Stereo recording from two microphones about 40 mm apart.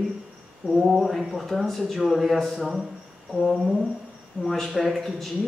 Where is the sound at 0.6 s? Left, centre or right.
Centre.